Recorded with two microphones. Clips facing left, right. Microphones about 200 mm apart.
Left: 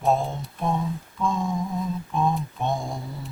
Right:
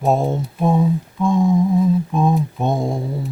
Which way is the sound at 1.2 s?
20° right (ahead or behind).